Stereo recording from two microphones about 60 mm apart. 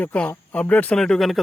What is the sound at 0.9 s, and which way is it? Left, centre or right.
Speech, centre.